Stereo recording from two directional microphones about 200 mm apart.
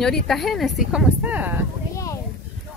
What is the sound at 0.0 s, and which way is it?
Speech, centre (ahead or behind).